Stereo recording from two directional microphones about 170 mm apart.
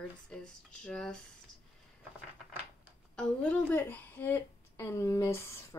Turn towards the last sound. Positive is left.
turn(degrees=15)  # may be behind; listen again after turning